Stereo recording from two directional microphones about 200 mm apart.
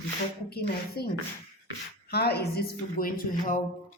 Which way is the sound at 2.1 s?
55° left (ahead or behind).